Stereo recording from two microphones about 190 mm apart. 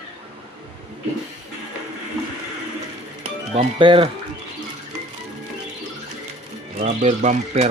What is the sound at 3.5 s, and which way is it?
Speech, 30° right (ahead or behind).